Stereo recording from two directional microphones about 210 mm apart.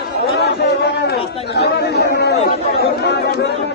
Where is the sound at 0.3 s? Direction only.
50° left (ahead or behind).